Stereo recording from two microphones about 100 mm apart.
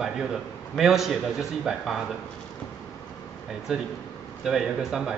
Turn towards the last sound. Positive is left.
turn(degrees=-5)  # may be behind; listen again after turning